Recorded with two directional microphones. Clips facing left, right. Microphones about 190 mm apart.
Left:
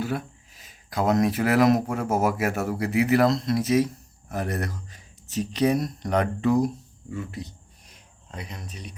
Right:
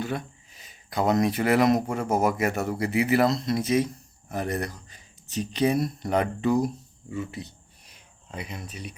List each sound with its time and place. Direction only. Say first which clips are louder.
0.0 s speech: left 2 dB; 5° left (ahead or behind)